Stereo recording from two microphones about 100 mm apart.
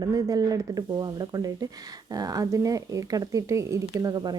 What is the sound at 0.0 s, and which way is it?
A woman's voice, 40° right (ahead or behind).